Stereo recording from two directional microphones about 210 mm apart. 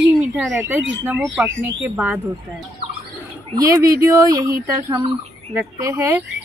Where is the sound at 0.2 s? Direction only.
5° right (ahead or behind).